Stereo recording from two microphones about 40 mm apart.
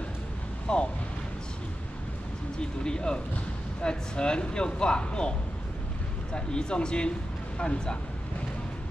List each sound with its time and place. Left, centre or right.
0.7 s speech: left
2.6 s speech: left
6.3 s speech: left